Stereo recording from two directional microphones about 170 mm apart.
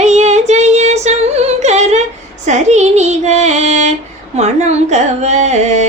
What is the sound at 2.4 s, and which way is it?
Music, 45° right (ahead or behind).